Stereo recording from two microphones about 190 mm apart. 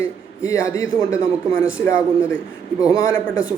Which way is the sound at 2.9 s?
15° left (ahead or behind).